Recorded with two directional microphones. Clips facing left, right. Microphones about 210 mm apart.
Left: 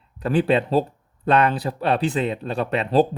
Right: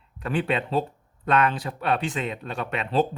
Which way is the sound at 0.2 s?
35° left (ahead or behind).